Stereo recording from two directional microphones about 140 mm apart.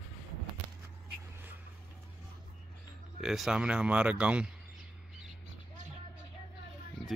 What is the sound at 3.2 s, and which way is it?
Speech, 5° right (ahead or behind).